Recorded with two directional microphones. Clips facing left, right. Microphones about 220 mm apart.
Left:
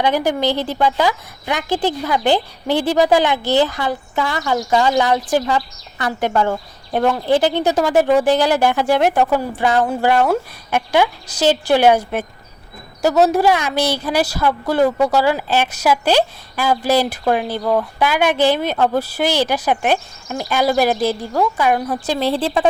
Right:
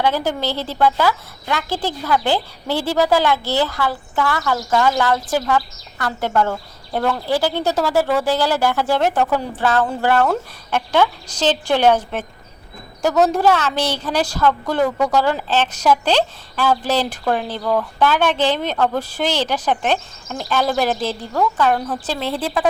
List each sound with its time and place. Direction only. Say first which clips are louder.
0.0 s a woman's voice: left 3 dB; 15° left (ahead or behind)
17.6 s speech: left 2 dB; 25° left (ahead or behind)
18.0 s a woman's voice: left 1 dB; 10° left (ahead or behind)
22.2 s speech: left 5 dB; 30° left (ahead or behind)